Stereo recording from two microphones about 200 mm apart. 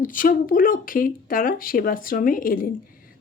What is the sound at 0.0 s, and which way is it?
Speech, 40° left (ahead or behind).